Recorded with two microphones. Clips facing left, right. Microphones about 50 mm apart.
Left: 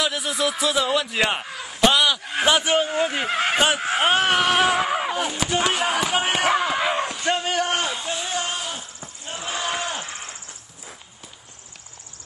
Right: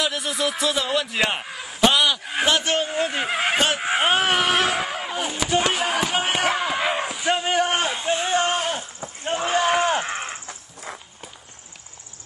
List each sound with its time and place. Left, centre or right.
0.0 s a man's voice: centre
3.5 s speech: centre
4.0 s a sound: centre
5.1 s speech: centre
7.4 s a man's voice: centre; by 8.8 s right
9.2 s battle cry: right